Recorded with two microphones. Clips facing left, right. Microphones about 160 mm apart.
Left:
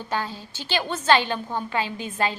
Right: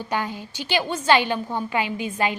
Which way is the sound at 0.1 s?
15° right (ahead or behind).